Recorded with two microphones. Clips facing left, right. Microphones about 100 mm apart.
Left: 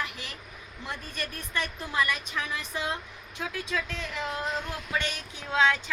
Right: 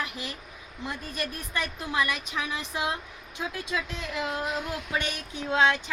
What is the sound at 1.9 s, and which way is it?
A woman's voice, 15° right (ahead or behind).